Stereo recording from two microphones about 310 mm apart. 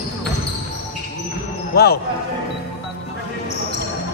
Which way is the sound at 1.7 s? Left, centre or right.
Left.